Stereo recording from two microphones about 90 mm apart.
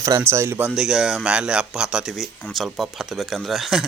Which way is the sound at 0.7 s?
5° right (ahead or behind).